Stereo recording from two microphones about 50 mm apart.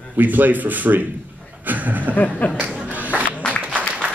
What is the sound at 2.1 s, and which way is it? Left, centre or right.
Speech, left.